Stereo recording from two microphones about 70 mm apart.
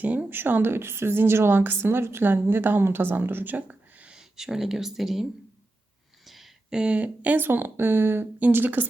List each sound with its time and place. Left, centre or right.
0.0 s a woman's voice: right
4.2 s speech: centre
6.2 s speech: centre; by 8.9 s right